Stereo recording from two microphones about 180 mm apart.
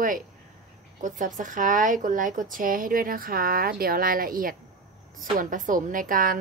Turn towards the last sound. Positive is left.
turn(degrees=-50)  # may be behind; listen again after turning